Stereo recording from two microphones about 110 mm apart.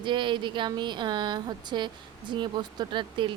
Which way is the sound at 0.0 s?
45° right (ahead or behind).